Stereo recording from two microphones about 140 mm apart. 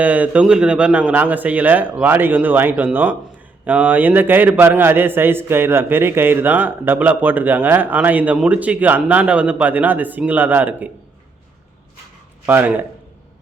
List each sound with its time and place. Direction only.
0.0 s a man's voice: 10° right (ahead or behind)
12.5 s a man's voice: 15° right (ahead or behind)